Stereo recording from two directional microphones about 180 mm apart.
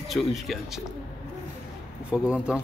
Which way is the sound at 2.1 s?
5° right (ahead or behind).